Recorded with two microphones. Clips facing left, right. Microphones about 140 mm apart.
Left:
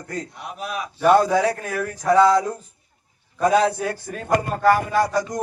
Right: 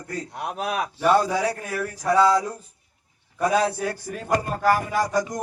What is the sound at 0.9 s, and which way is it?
Speech, centre (ahead or behind).